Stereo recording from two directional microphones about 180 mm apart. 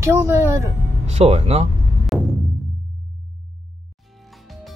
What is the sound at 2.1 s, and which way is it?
Music, centre (ahead or behind).